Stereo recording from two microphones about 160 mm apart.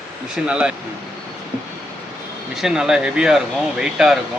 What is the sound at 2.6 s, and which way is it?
Speech, 5° right (ahead or behind).